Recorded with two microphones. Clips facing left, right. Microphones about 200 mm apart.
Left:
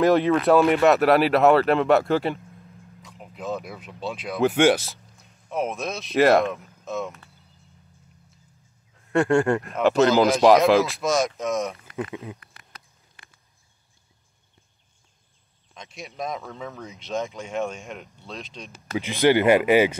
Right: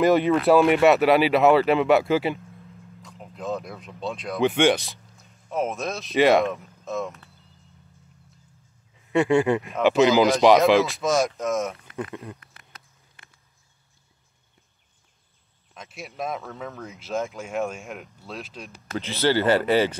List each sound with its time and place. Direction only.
0.0 s speech: centre (ahead or behind)
8.9 s speech: centre (ahead or behind)
15.7 s speech: 5° right (ahead or behind)
18.9 s speech: 15° left (ahead or behind)